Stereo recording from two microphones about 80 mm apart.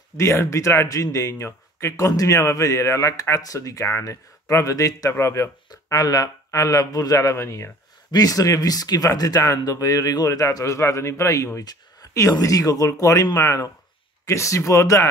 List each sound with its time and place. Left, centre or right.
0.2 s speech: left
5.9 s speech: left
8.1 s speech: left
11.6 s a sound: left
12.1 s speech: left